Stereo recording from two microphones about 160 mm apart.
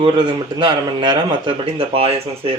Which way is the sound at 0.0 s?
30° right (ahead or behind).